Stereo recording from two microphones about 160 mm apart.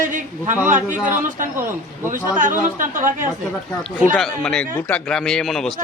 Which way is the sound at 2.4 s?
55° right (ahead or behind).